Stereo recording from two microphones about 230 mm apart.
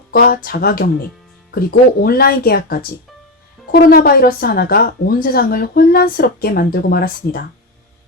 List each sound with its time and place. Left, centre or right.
0.1 s speech: left